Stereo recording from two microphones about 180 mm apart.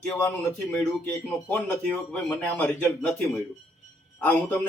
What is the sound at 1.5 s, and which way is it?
Speech, 10° left (ahead or behind).